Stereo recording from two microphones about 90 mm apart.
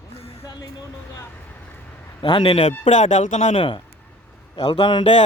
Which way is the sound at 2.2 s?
70° left (ahead or behind).